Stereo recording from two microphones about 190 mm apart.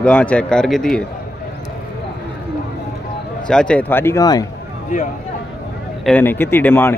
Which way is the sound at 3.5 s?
5° left (ahead or behind).